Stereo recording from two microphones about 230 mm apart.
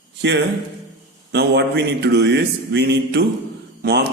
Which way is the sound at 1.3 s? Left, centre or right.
Right.